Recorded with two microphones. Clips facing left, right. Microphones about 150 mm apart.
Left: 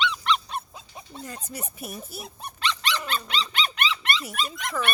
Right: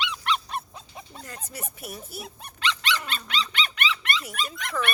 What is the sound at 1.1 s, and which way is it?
Speech, 25° left (ahead or behind).